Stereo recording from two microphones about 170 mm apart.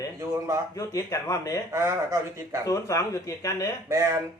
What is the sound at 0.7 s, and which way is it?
Speech, 20° left (ahead or behind).